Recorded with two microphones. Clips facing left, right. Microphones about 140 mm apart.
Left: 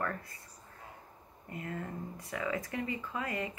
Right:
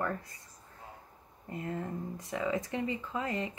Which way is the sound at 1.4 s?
25° right (ahead or behind).